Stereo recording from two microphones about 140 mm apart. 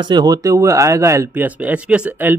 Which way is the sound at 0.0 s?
30° right (ahead or behind).